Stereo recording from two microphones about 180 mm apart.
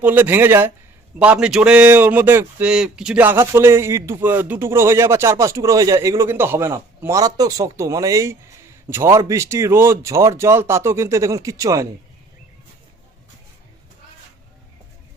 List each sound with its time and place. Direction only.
0.0 s speech: 10° right (ahead or behind)